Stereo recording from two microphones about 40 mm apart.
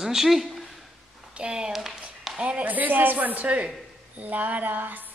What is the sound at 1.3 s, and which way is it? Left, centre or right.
Speech, right.